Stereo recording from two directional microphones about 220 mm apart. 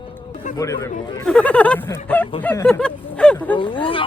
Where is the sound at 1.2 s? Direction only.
5° left (ahead or behind).